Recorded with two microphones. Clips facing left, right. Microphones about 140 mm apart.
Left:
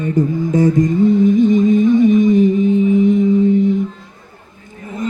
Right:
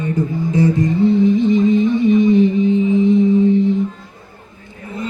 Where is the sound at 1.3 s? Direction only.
45° left (ahead or behind).